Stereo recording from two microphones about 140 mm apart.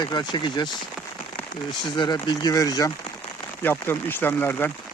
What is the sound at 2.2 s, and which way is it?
Speech, 30° left (ahead or behind).